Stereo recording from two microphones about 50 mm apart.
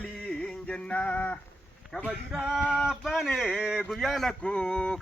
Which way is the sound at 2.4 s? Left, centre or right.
Right.